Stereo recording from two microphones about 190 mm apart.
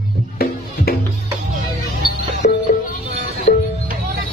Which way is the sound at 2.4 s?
45° left (ahead or behind).